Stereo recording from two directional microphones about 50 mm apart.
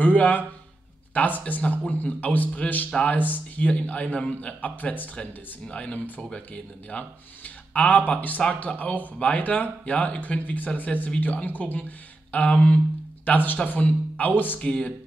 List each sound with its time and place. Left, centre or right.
0.0 s speech: left
5.9 s speech: left
6.3 s speech: left
13.2 s speech: left
14.6 s speech: left